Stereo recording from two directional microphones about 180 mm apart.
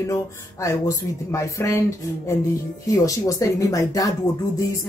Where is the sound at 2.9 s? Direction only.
20° left (ahead or behind).